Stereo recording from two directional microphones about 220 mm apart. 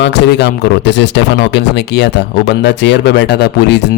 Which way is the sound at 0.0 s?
50° left (ahead or behind).